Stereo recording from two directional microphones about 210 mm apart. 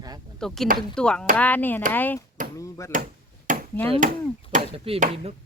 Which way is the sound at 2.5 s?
15° left (ahead or behind).